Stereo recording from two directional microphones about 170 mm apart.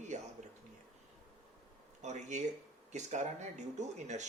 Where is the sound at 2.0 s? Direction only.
45° right (ahead or behind).